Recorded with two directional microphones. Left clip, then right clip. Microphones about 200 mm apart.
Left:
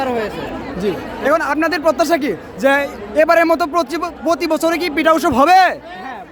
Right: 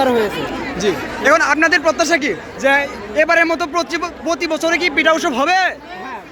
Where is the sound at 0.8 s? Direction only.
20° left (ahead or behind); by 5.7 s 45° left (ahead or behind).